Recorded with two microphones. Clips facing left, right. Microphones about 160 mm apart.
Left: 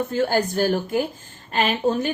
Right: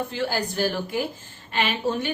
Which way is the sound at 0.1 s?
45° left (ahead or behind).